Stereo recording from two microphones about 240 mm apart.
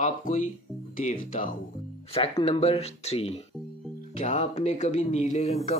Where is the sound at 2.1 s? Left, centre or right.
Left.